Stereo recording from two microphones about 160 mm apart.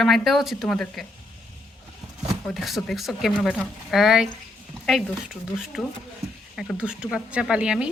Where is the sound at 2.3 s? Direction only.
Centre (ahead or behind).